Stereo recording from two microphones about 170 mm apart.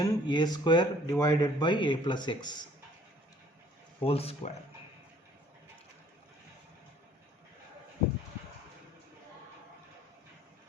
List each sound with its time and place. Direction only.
0.0 s speech: 25° left (ahead or behind)
4.0 s speech: 35° left (ahead or behind)